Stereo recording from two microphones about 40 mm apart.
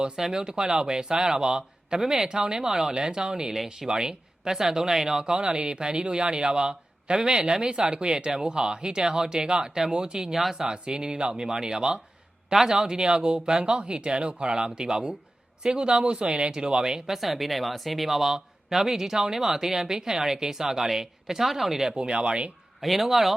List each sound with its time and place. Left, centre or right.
0.2 s speech: centre
5.2 s speech: right
17.2 s speech: centre; by 22.5 s right
22.8 s speech: centre